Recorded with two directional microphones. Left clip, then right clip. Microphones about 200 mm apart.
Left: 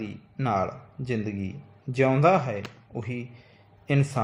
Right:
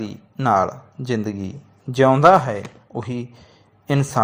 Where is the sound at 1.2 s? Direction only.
50° right (ahead or behind).